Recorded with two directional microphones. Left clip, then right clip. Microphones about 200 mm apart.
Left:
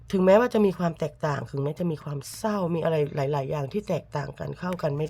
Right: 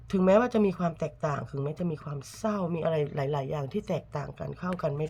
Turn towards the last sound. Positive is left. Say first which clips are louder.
# left 3 dB
turn(degrees=25)  # may be behind; listen again after turning